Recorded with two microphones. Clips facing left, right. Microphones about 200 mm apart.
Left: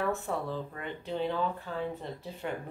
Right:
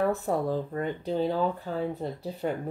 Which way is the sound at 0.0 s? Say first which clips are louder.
Right 6 dB; 40° right (ahead or behind).